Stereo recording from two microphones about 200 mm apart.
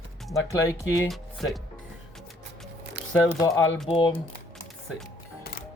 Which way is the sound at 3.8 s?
25° left (ahead or behind).